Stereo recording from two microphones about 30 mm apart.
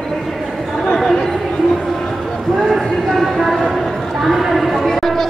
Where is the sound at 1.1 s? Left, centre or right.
Left.